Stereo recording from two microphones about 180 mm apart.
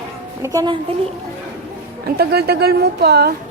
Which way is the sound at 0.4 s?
20° right (ahead or behind).